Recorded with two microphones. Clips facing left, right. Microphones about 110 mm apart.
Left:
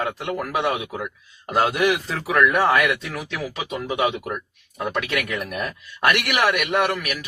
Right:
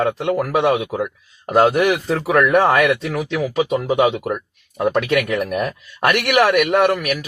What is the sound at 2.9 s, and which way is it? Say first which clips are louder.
A man's voice: right 6 dB; 30° right (ahead or behind).